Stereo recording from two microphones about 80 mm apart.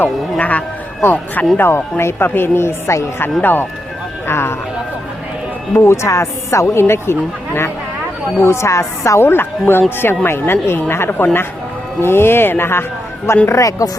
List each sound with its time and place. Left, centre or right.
0.0 s speech: centre; by 3.2 s left
3.2 s speech: left
5.7 s speech: left
13.6 s speech: left